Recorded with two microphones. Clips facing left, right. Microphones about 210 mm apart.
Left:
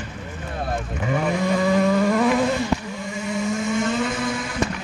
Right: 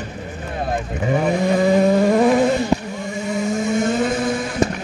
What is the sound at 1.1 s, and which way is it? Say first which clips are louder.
Vehicle: right 4 dB; 30° right (ahead or behind).